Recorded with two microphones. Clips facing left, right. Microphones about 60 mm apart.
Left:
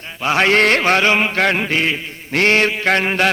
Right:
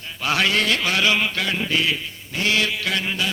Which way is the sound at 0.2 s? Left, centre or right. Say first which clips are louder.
Left 5 dB; left.